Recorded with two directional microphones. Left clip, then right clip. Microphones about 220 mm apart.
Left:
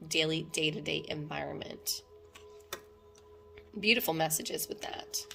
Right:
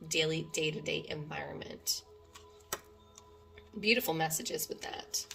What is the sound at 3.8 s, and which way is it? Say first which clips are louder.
Speech: left 2 dB; 40° left (ahead or behind).